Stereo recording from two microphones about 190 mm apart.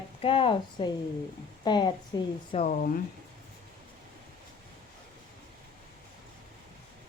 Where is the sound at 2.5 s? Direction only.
40° left (ahead or behind).